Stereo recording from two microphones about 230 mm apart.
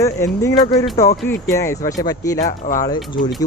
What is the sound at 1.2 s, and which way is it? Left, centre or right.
Speech, centre.